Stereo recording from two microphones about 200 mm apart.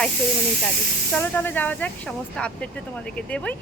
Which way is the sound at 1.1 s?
10° left (ahead or behind).